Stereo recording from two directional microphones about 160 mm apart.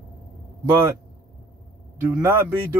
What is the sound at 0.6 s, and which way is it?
Speech, 15° right (ahead or behind).